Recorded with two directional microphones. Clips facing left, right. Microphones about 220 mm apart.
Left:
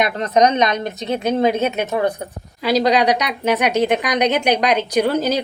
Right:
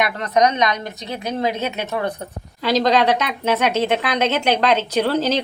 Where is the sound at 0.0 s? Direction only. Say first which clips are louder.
Left 2 dB; 20° left (ahead or behind).